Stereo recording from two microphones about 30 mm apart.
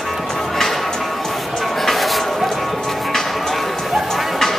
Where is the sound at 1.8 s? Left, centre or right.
Centre.